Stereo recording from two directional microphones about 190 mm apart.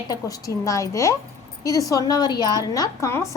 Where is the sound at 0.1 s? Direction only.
20° left (ahead or behind).